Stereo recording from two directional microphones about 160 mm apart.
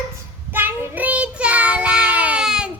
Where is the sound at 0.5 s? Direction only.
10° right (ahead or behind).